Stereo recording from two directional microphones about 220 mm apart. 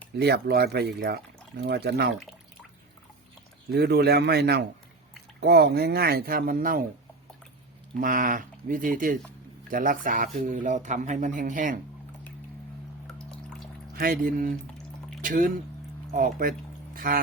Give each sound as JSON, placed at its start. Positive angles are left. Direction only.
{"t": 0.2, "sound": "speech", "side_deg": -45}
{"t": 3.7, "sound": "speech", "side_deg": -45}
{"t": 7.9, "sound": "speech", "side_deg": -35}
{"t": 13.1, "sound": "music", "side_deg": 5}
{"t": 13.9, "sound": "speech", "side_deg": -40}